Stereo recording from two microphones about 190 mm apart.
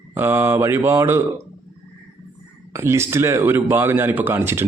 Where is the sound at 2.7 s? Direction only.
15° right (ahead or behind).